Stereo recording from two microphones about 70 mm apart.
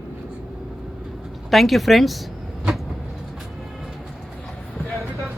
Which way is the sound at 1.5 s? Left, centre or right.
Centre.